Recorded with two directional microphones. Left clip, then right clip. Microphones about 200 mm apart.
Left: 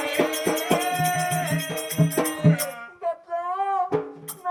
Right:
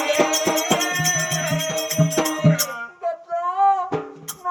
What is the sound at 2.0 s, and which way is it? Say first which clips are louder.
Music: right 2 dB; 20° left (ahead or behind).